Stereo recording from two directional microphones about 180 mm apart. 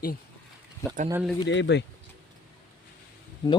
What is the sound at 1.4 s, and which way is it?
Speech, 85° left.